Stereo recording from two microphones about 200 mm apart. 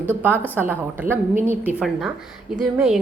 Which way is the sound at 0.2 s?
10° right (ahead or behind).